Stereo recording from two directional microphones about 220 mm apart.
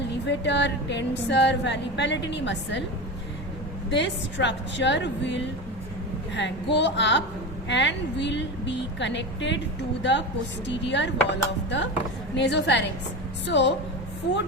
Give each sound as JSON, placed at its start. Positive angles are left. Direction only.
{"t": 0.3, "sound": "music", "side_deg": 55}
{"t": 3.8, "sound": "music", "side_deg": 55}